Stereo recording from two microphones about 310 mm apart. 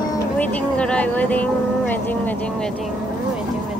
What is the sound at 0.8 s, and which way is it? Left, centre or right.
Speech, centre.